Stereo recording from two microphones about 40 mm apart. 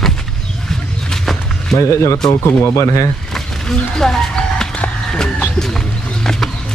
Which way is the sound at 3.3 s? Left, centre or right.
Centre.